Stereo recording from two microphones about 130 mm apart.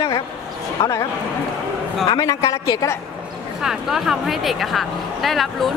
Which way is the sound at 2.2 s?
25° left (ahead or behind).